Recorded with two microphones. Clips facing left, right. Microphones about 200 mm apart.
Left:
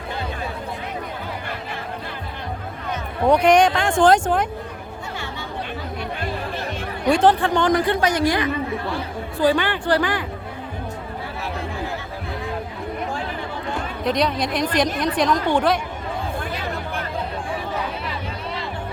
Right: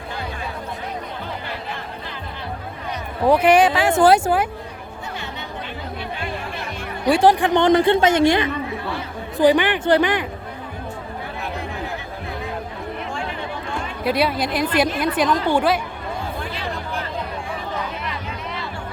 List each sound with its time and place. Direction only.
3.2 s speech: 5° right (ahead or behind)
7.1 s speech: 10° right (ahead or behind)
14.0 s a woman's voice: 5° right (ahead or behind)